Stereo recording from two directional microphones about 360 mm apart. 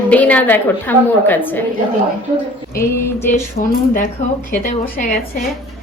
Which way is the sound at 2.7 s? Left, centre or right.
Centre.